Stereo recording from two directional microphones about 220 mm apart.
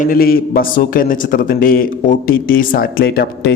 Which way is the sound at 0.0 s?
40° left (ahead or behind).